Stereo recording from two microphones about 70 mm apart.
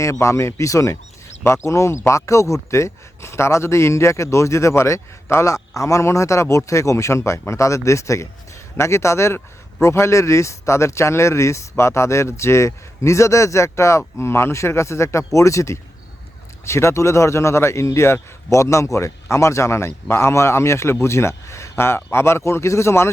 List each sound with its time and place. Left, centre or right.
0.0 s speech: left